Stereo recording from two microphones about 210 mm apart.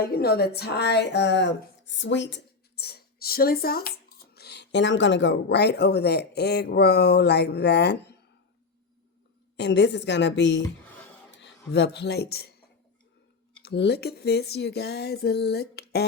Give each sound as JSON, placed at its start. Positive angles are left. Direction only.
{"t": 0.0, "sound": "a woman's voice", "side_deg": 50}
{"t": 9.6, "sound": "a woman's voice", "side_deg": 55}
{"t": 13.6, "sound": "speech", "side_deg": 50}